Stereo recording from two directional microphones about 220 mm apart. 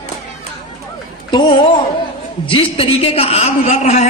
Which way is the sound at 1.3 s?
20° left (ahead or behind).